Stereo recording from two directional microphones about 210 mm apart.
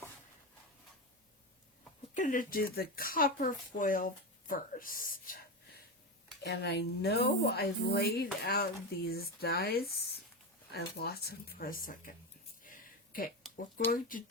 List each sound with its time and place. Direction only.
2.1 s a woman's voice: 40° left (ahead or behind)
12.6 s a sound: 40° left (ahead or behind)
13.9 s speech: 40° left (ahead or behind)